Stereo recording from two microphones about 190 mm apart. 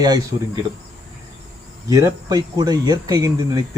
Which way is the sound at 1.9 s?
20° right (ahead or behind).